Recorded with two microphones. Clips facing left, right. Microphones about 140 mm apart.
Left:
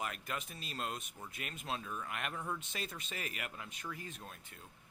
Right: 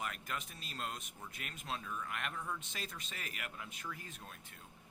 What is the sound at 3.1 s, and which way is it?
Speech, centre (ahead or behind).